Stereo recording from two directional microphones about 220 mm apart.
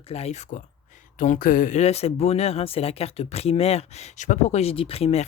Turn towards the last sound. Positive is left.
turn(degrees=30)  # may be behind; listen again after turning